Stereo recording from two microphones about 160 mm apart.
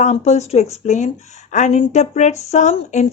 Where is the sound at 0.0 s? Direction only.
45° left (ahead or behind).